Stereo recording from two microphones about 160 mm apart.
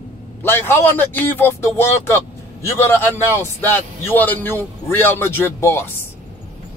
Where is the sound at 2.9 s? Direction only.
15° left (ahead or behind).